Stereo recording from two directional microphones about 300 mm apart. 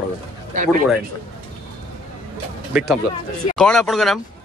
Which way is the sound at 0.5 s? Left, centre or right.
Right.